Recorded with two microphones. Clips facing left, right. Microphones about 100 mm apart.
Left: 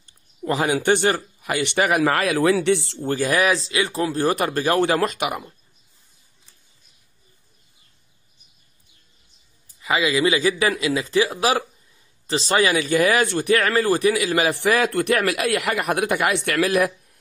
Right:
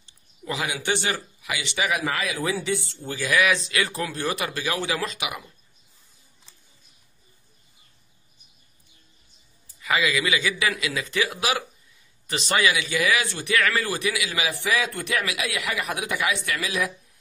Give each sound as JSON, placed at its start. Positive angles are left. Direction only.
{"t": 0.0, "sound": "speech", "side_deg": 45}
{"t": 3.1, "sound": "speech", "side_deg": 45}
{"t": 9.8, "sound": "speech", "side_deg": 25}
{"t": 14.5, "sound": "speech", "side_deg": 60}